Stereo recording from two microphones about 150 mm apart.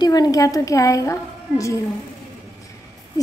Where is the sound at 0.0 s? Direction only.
25° left (ahead or behind).